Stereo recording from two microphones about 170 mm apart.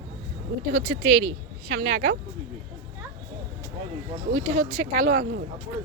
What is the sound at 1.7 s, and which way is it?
Speech, 70° right (ahead or behind).